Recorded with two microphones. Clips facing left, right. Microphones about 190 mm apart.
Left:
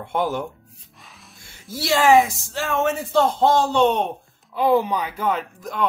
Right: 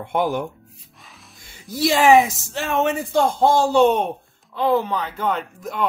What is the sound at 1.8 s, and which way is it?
Speech, 15° right (ahead or behind).